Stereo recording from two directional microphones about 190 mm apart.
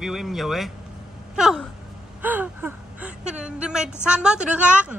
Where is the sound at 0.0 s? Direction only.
Centre (ahead or behind).